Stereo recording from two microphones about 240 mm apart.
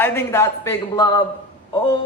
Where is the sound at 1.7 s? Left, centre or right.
Centre.